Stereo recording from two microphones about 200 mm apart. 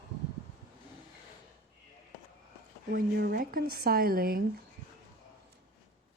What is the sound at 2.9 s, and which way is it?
A woman's voice, 50° right (ahead or behind).